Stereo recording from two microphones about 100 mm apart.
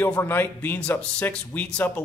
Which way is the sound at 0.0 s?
20° left (ahead or behind).